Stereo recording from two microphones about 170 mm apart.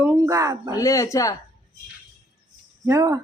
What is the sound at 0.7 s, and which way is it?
Speech, 20° left (ahead or behind).